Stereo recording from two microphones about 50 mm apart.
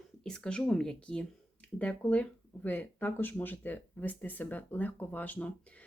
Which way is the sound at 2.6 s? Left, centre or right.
Left.